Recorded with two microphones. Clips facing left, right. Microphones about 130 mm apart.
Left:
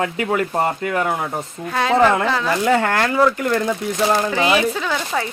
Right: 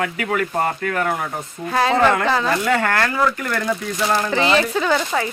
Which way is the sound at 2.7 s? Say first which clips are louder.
Left 2 dB; 20° left (ahead or behind).